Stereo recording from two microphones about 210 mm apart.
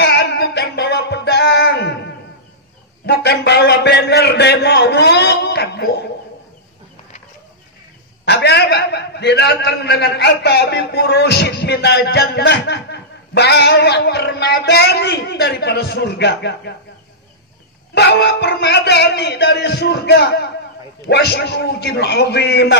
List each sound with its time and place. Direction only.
0.0 s music: 50° left (ahead or behind)
3.1 s a sound: 55° left (ahead or behind)
8.3 s a man's voice: 55° left (ahead or behind)
17.9 s a man's voice: 50° left (ahead or behind)